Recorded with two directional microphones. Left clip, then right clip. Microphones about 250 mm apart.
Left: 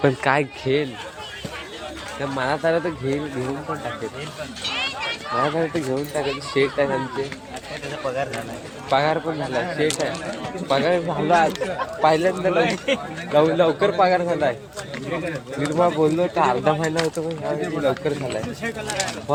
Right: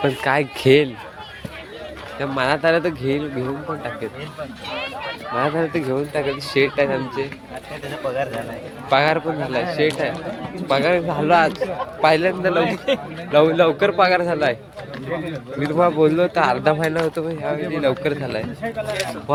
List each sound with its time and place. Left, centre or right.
0.0 s speech: centre
0.7 s speech: right
2.4 s a man's voice: centre
4.6 s a sound: left
5.4 s a man's voice: centre
8.9 s a man's voice: centre
15.6 s a man's voice: centre